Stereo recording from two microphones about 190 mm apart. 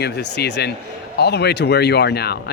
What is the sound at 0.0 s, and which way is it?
Speech, 60° left (ahead or behind).